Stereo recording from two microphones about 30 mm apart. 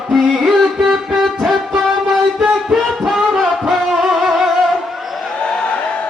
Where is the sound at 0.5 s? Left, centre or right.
Centre.